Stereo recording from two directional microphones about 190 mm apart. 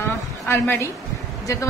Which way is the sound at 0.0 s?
10° left (ahead or behind).